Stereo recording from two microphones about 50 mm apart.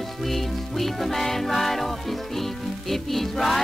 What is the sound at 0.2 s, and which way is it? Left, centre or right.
Music, centre.